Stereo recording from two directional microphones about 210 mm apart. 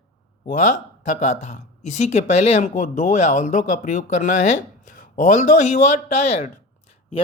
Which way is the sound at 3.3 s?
35° left (ahead or behind).